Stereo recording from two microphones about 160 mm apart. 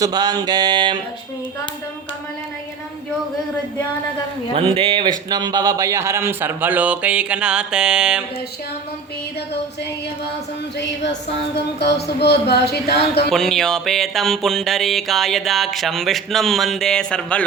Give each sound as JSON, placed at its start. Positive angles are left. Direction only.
{"t": 0.0, "sound": "mantra", "side_deg": -25}
{"t": 4.5, "sound": "speech", "side_deg": -35}
{"t": 11.5, "sound": "speech", "side_deg": 90}
{"t": 13.3, "sound": "a sound", "side_deg": 0}